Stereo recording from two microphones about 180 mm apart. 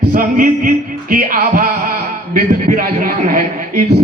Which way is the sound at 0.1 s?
50° right (ahead or behind).